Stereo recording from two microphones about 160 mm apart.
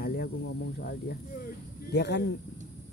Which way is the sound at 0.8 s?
90° left.